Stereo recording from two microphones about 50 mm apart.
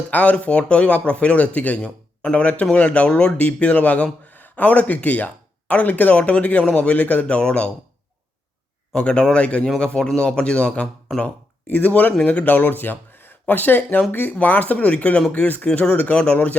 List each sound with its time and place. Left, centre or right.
0.1 s speech: left
9.0 s a man's voice: centre